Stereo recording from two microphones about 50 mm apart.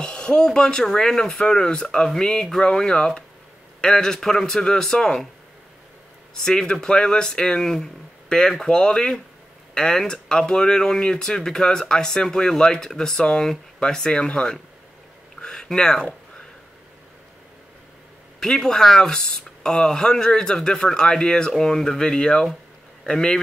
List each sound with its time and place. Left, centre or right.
0.0 s speech: centre
6.4 s speech: centre
15.4 s a sound: centre
18.4 s speech: centre